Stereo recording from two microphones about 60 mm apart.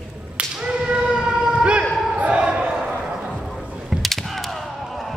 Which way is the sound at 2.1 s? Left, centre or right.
Right.